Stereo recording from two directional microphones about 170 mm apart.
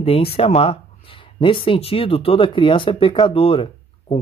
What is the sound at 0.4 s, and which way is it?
Speech, 35° left (ahead or behind).